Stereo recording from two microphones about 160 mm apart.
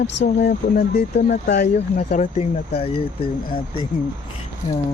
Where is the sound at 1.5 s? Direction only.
90° left.